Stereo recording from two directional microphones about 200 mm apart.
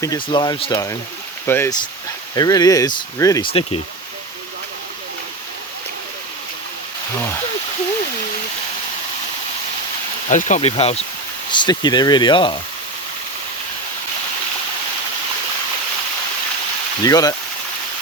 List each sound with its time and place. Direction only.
0.0 s speech: 20° left (ahead or behind)
10.2 s speech: 35° left (ahead or behind)
17.0 s speech: 20° left (ahead or behind)